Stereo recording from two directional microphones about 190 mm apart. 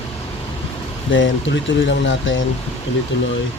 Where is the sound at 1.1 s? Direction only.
75° left (ahead or behind).